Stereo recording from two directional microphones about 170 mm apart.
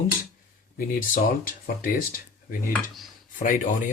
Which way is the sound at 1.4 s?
55° left (ahead or behind).